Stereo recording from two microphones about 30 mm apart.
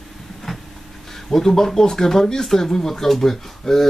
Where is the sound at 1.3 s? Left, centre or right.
Centre.